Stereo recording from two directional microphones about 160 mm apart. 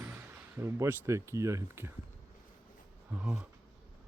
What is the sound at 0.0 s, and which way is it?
Speech, 15° right (ahead or behind).